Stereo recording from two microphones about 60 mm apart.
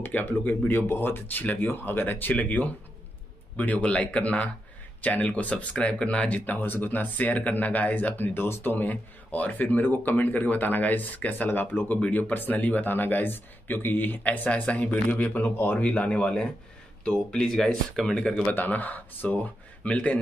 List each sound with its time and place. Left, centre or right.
0.0 s speech: left
15.8 s speech: centre
18.5 s speech: left